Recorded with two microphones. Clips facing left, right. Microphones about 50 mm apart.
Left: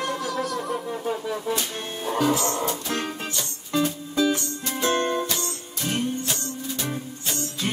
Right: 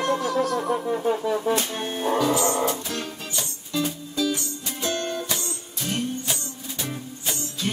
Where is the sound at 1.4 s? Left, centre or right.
Right.